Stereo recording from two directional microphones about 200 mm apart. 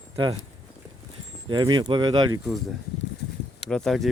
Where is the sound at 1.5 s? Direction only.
20° right (ahead or behind).